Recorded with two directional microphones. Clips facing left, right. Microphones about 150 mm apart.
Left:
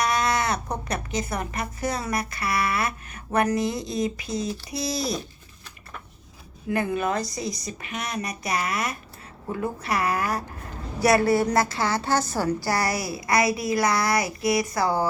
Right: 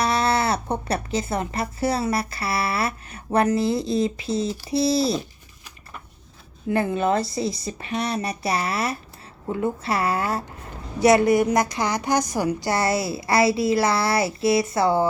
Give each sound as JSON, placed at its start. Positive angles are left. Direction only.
{"t": 0.0, "sound": "a woman's voice", "side_deg": -30}
{"t": 6.7, "sound": "a woman's voice", "side_deg": -30}